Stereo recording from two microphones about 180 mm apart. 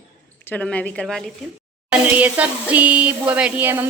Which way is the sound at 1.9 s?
10° right (ahead or behind).